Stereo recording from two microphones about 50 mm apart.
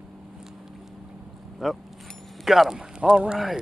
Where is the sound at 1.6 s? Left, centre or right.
Centre.